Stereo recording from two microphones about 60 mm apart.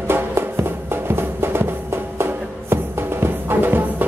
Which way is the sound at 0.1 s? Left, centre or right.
Right.